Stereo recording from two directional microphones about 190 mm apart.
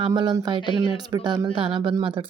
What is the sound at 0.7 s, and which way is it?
Speech, 25° left (ahead or behind).